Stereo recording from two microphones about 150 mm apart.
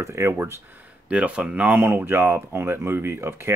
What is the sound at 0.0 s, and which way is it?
Speech, 20° right (ahead or behind).